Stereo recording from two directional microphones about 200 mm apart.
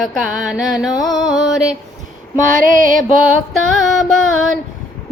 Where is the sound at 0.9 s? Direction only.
20° left (ahead or behind).